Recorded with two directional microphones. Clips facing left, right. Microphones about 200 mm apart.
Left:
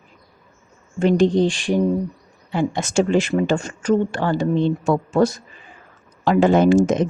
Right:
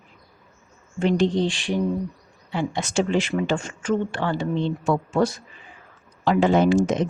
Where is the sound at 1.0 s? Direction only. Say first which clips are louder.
Left 5 dB; 45° left (ahead or behind).